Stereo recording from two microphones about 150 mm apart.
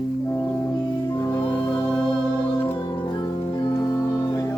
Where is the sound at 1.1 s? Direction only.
20° left (ahead or behind).